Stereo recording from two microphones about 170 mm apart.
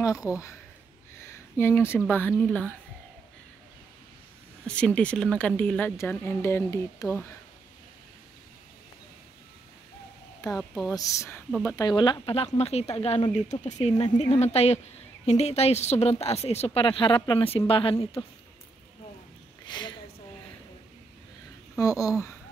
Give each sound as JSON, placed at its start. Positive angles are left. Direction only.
{"t": 0.0, "sound": "speech", "side_deg": 20}
{"t": 1.2, "sound": "a sound", "side_deg": 15}
{"t": 2.0, "sound": "speech", "side_deg": 10}
{"t": 4.6, "sound": "speech", "side_deg": 5}
{"t": 10.5, "sound": "speech", "side_deg": 0}
{"t": 10.9, "sound": "speech", "side_deg": 20}
{"t": 19.6, "sound": "a sound", "side_deg": 25}
{"t": 21.7, "sound": "speech", "side_deg": 20}